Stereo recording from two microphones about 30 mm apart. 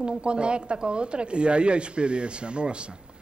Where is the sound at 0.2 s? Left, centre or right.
Right.